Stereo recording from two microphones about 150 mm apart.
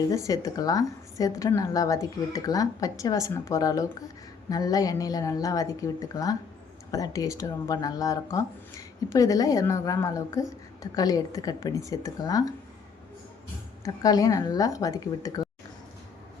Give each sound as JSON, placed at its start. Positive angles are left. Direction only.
{"t": 0.3, "sound": "a woman's voice", "side_deg": 25}
{"t": 13.8, "sound": "a woman's voice", "side_deg": 25}